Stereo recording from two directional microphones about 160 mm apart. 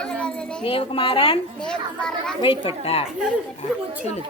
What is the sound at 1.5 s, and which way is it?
Speech, 5° left (ahead or behind).